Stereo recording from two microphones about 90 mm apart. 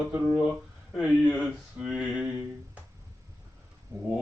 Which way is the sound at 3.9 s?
25° right (ahead or behind).